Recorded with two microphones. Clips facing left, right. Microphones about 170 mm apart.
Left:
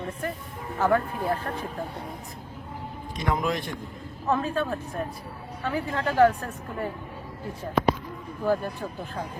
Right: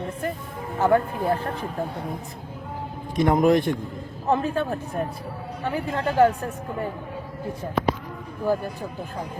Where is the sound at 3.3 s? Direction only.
55° right (ahead or behind).